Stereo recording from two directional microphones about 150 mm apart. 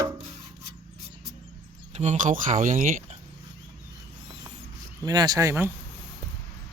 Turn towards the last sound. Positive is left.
turn(degrees=-20)  # may be behind; listen again after turning